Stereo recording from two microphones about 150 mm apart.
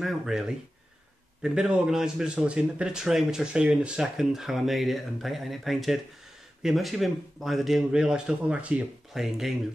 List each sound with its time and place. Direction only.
0.0 s a man's voice: 5° right (ahead or behind)